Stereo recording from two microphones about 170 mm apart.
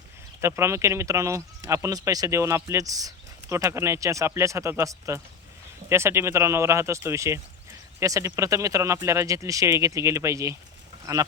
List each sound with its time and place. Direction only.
0.4 s speech: 15° right (ahead or behind)